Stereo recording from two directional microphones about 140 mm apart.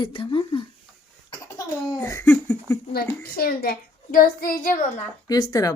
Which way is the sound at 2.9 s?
90° left.